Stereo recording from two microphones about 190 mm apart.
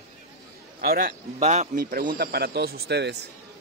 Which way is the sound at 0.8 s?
50° right (ahead or behind).